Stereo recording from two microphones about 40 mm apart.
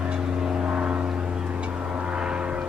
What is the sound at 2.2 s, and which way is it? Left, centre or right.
Vehicle, right.